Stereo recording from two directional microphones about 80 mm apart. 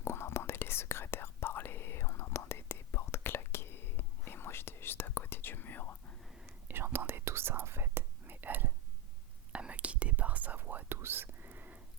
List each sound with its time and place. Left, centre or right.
0.0 s whispering: left
6.7 s whispering: right